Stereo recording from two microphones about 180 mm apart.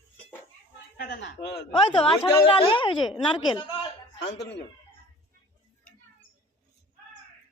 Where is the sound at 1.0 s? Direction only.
70° left (ahead or behind).